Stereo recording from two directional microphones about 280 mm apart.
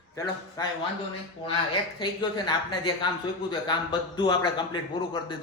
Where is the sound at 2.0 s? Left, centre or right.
Centre.